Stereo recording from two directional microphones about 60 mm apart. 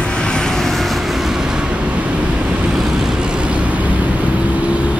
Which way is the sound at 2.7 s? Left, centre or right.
Centre.